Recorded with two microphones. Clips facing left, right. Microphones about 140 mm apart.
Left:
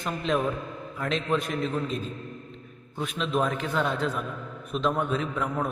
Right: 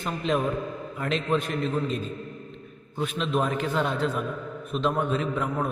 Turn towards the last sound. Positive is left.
turn(degrees=0)  # may be behind; listen again after turning